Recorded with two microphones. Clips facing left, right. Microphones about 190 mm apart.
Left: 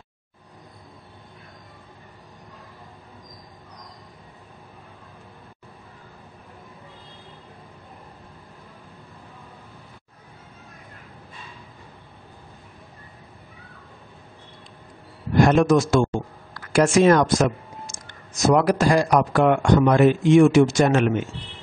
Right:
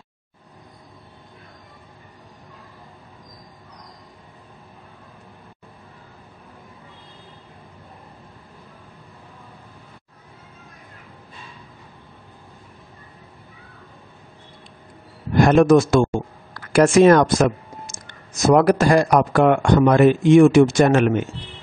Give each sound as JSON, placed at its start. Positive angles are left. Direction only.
{"t": 15.4, "sound": "speech", "side_deg": -55}